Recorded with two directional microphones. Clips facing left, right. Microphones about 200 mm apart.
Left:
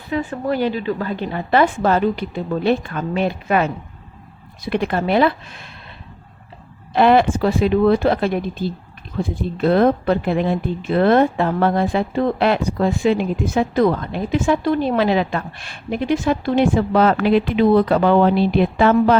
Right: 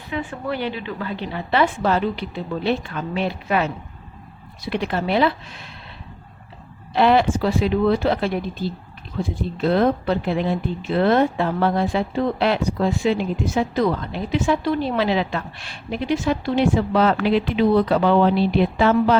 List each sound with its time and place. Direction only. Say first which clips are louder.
0.1 s speech: left 5 dB; 40° left (ahead or behind)
6.9 s speech: left 3 dB; 55° left (ahead or behind)